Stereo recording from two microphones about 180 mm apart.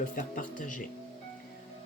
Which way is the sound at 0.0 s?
45° left (ahead or behind).